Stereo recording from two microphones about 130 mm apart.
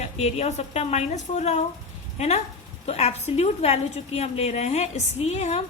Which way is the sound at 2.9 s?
55° left (ahead or behind).